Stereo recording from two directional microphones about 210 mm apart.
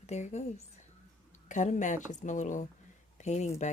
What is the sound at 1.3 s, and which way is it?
Speech, 35° left (ahead or behind).